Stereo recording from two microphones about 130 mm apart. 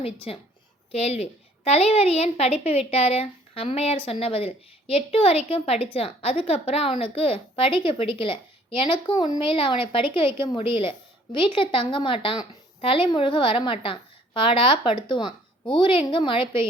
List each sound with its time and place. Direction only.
0.0 s a woman's voice: 50° left (ahead or behind)